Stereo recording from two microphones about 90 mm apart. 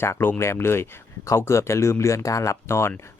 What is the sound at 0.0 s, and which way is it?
Speech, 25° left (ahead or behind).